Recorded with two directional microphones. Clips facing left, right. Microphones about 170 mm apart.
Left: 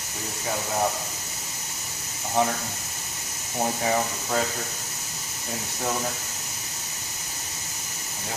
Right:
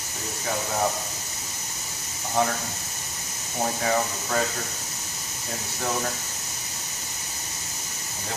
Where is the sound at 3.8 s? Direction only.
15° left (ahead or behind).